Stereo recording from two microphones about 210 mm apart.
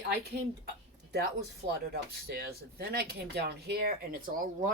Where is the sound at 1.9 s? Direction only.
45° right (ahead or behind).